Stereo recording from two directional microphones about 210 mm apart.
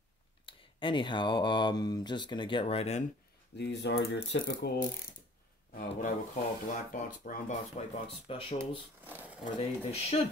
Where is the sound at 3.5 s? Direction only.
55° left (ahead or behind).